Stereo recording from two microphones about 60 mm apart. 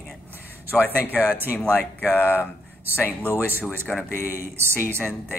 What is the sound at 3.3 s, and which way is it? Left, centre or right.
Speech, right.